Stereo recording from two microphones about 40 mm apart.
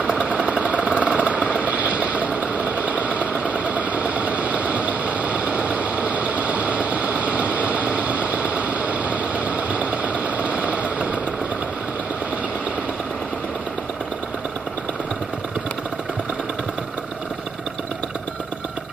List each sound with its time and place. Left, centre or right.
0.3 s vehicle: right